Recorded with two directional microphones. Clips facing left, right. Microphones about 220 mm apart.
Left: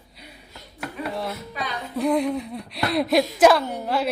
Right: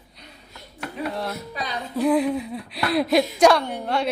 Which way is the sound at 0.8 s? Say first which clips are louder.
Right 1 dB; centre (ahead or behind).